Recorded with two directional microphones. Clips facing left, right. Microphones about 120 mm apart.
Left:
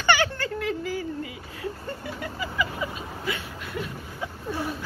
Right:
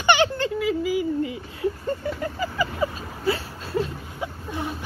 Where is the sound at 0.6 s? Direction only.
5° right (ahead or behind).